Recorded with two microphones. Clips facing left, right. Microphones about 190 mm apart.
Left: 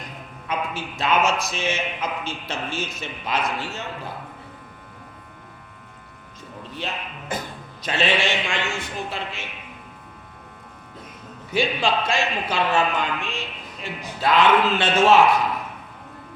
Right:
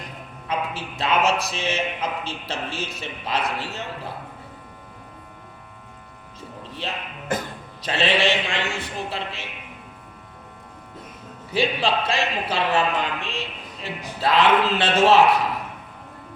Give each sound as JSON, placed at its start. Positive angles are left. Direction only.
{"t": 0.0, "sound": "a man's voice", "side_deg": -30}
{"t": 6.8, "sound": "a man's voice", "side_deg": -30}
{"t": 11.5, "sound": "a man's voice", "side_deg": -30}